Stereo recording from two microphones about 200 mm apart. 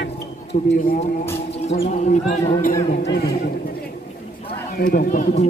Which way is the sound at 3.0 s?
60° left (ahead or behind).